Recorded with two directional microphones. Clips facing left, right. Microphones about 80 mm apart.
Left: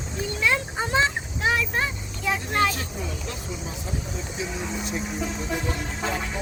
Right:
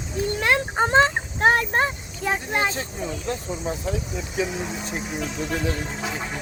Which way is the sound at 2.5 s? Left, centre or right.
Right.